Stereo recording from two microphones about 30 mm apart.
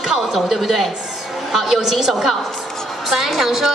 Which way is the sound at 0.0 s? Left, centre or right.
Centre.